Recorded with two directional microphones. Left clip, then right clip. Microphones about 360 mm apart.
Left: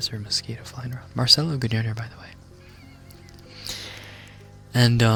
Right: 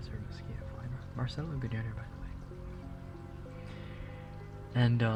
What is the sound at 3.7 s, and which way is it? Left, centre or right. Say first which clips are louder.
Music: left 13 dB; left.